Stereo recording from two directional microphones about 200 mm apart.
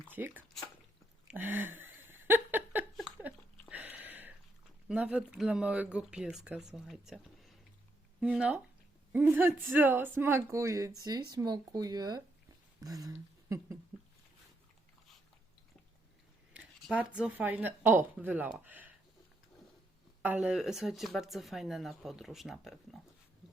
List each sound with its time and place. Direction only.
0.1 s speech: 10° right (ahead or behind)
1.3 s a sound: 10° right (ahead or behind)
4.9 s speech: 5° right (ahead or behind)
16.5 s a sound: 5° right (ahead or behind)
17.2 s speech: 10° right (ahead or behind)
20.2 s speech: 5° right (ahead or behind)